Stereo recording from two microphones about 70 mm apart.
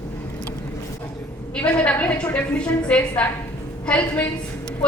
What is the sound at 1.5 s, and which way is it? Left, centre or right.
A woman's voice, centre.